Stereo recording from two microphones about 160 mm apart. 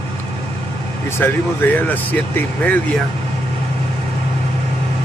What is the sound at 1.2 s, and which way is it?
Speech, 10° left (ahead or behind).